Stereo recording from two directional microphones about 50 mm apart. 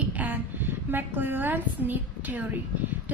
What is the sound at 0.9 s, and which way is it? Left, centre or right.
A woman's voice, right.